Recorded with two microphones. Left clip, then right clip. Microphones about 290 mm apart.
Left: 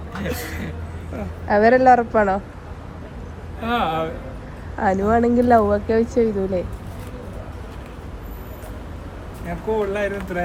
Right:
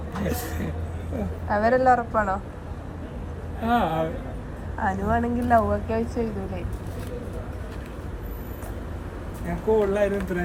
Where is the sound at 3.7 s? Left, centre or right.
Centre.